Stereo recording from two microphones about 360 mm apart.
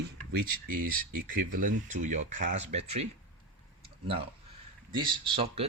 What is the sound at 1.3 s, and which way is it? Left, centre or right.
Speech, right.